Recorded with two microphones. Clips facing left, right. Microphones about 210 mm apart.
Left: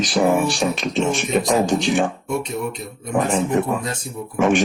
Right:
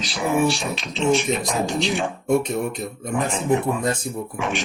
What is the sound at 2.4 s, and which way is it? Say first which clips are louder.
Speech: right 1 dB; 50° right (ahead or behind).